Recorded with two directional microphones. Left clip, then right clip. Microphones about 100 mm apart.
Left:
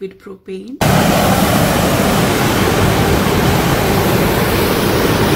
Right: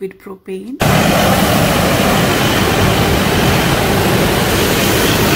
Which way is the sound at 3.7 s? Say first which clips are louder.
Right 1 dB; 5° right (ahead or behind).